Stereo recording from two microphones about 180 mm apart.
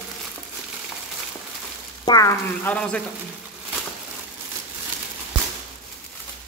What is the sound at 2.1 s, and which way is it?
Speech, 20° left (ahead or behind).